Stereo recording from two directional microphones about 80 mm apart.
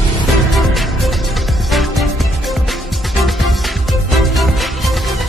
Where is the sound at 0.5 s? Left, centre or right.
Centre.